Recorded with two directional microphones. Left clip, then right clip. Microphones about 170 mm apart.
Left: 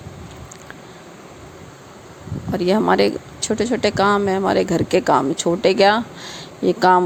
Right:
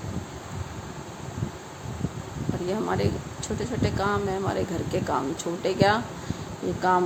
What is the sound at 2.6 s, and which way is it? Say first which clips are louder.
Speech: left 12 dB; 55° left (ahead or behind).